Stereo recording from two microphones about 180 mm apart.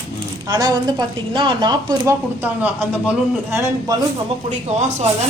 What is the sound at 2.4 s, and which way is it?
Speech, 10° right (ahead or behind).